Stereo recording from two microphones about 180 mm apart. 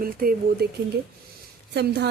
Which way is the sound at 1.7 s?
70° right (ahead or behind).